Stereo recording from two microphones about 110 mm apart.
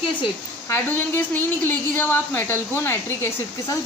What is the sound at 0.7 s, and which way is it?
A woman's voice, 20° left (ahead or behind).